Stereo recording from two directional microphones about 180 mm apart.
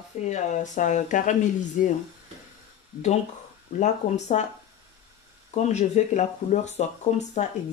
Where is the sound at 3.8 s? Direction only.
40° left (ahead or behind).